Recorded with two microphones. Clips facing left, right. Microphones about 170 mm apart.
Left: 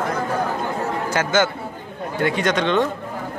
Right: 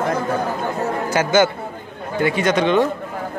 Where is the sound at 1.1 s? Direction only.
10° right (ahead or behind).